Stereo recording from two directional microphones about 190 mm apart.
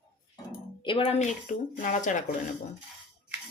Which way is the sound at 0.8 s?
30° left (ahead or behind).